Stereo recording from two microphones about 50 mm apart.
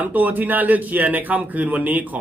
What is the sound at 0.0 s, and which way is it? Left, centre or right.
A man's voice, right.